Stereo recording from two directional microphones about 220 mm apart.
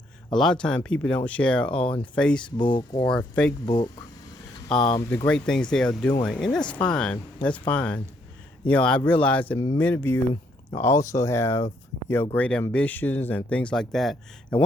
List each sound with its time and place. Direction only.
0.3 s speech: 5° left (ahead or behind)
2.6 s speech: 20° left (ahead or behind)
3.1 s speech: 5° left (ahead or behind)
4.7 s speech: centre (ahead or behind)